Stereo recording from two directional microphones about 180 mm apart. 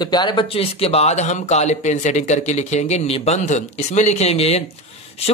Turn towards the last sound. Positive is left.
turn(degrees=35)  # may be behind; listen again after turning